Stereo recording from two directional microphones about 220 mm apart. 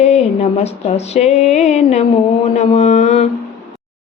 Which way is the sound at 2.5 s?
30° left (ahead or behind).